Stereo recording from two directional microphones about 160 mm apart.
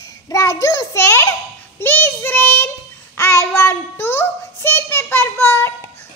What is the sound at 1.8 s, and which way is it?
Child singing, 15° left (ahead or behind).